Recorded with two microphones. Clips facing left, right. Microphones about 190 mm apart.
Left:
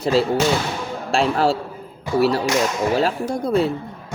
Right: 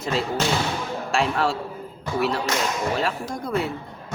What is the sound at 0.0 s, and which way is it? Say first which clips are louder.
A man's voice: left 7 dB; 35° left (ahead or behind).